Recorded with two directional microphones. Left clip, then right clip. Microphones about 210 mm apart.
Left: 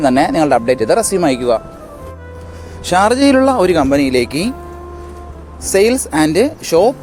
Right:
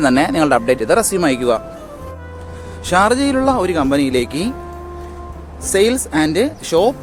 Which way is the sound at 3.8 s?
15° left (ahead or behind).